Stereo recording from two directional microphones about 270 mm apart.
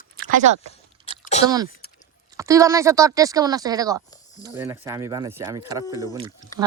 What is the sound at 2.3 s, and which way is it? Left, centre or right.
Speech, centre.